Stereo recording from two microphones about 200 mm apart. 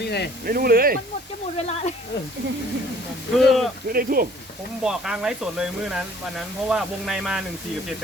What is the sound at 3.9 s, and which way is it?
Speech, 45° right (ahead or behind).